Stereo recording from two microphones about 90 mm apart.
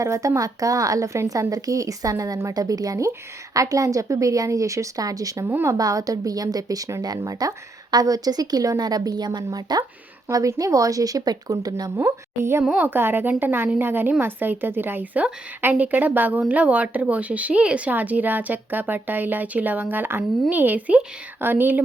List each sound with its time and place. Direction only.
0.0 s a woman's voice: 35° right (ahead or behind)
5.5 s a woman's voice: 25° right (ahead or behind)
5.7 s a woman's voice: 40° right (ahead or behind)
11.9 s a woman's voice: 30° right (ahead or behind)
12.6 s speech: 10° right (ahead or behind)
12.9 s a woman's voice: 25° right (ahead or behind)